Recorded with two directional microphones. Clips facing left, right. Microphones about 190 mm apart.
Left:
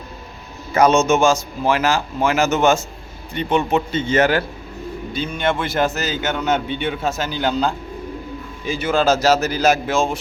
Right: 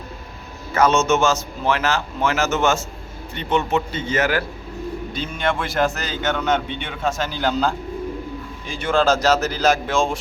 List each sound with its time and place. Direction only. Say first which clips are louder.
0.7 s a man's voice: left 3 dB; 15° left (ahead or behind)
5.1 s a man's voice: left 3 dB; centre (ahead or behind)